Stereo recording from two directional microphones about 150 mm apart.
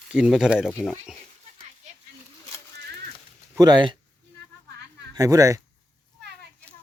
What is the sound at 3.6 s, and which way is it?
Speech, 30° right (ahead or behind).